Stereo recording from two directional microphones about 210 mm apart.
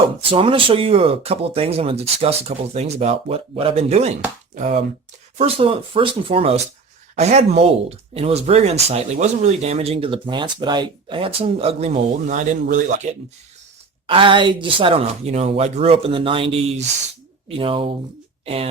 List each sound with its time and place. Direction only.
0.2 s speech: 25° right (ahead or behind)
14.1 s speech: 25° right (ahead or behind)